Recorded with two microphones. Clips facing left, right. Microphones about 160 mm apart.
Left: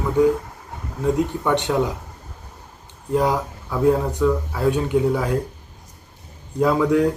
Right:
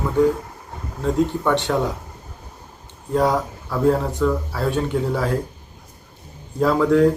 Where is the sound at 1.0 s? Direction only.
10° left (ahead or behind).